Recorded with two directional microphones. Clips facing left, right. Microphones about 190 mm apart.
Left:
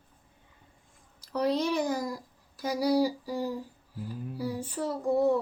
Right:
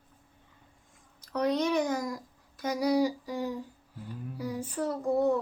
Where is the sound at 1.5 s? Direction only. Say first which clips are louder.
Even; 30° left (ahead or behind).